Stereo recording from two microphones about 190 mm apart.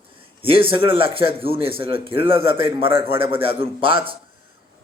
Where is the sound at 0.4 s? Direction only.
30° right (ahead or behind).